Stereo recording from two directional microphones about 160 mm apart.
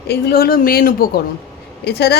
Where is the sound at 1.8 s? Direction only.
90° left.